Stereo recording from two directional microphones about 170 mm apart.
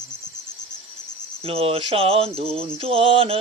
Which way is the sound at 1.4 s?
35° right (ahead or behind).